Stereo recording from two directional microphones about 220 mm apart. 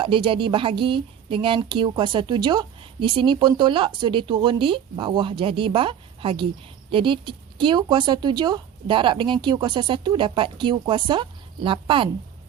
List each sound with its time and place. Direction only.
0.0 s speech: 25° right (ahead or behind)